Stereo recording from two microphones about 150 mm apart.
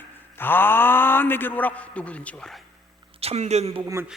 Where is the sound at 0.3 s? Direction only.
15° left (ahead or behind).